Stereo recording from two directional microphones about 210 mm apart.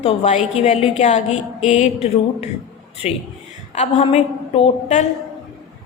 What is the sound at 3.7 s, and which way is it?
A woman's voice, 30° left (ahead or behind).